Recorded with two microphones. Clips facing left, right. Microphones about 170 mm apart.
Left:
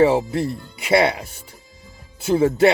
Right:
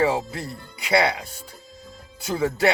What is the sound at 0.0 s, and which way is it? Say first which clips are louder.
Speech: left 6 dB; 25° left (ahead or behind).